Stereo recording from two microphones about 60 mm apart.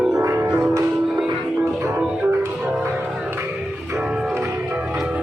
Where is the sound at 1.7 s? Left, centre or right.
Right.